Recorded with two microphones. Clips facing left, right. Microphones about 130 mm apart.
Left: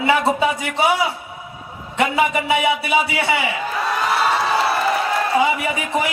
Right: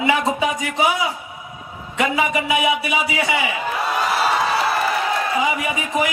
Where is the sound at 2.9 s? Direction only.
30° left (ahead or behind).